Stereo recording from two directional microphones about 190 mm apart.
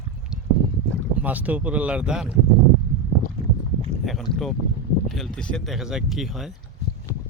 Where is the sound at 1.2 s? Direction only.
10° right (ahead or behind).